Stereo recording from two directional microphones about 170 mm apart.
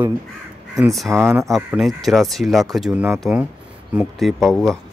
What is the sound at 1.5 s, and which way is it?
Speech, centre (ahead or behind).